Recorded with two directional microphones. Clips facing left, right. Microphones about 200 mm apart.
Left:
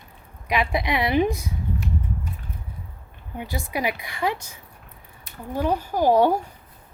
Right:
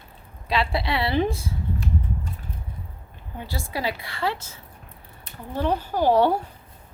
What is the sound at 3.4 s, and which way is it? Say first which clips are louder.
A woman's voice: left 2 dB; 20° left (ahead or behind).